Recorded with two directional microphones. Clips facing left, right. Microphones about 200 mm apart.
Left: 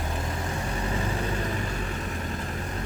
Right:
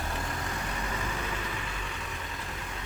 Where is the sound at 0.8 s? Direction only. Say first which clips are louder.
Left 6 dB; 35° left (ahead or behind).